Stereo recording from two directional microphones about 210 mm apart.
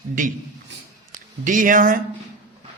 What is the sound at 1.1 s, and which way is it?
Speech, 40° right (ahead or behind).